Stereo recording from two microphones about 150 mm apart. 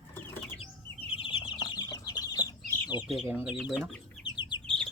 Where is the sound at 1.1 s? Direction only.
35° left (ahead or behind).